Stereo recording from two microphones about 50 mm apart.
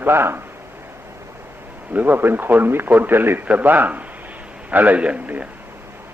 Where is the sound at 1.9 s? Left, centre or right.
Right.